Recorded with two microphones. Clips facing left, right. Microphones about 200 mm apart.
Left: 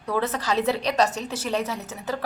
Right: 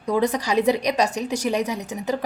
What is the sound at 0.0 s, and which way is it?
A woman's voice, 15° right (ahead or behind).